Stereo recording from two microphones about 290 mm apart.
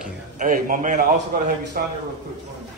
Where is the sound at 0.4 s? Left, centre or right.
Right.